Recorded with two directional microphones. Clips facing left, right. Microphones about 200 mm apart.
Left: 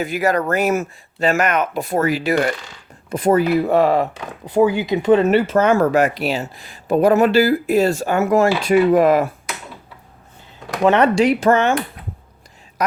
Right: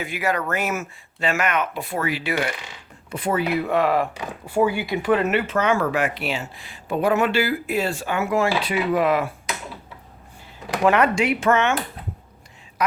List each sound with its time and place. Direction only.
0.0 s speech: 40° left (ahead or behind)
10.8 s speech: 30° left (ahead or behind)